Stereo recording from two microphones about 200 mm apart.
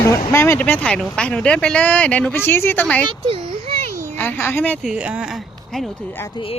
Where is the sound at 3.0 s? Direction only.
30° right (ahead or behind).